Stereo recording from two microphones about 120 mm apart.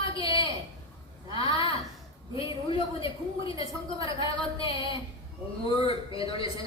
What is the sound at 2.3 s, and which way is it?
A woman's voice, 45° left (ahead or behind).